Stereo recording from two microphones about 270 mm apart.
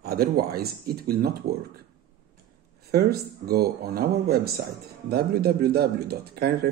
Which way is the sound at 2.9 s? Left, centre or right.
Right.